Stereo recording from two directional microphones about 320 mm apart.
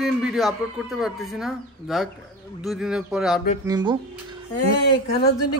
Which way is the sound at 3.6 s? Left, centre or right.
Centre.